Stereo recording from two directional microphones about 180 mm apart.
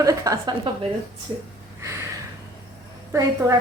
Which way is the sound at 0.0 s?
20° right (ahead or behind).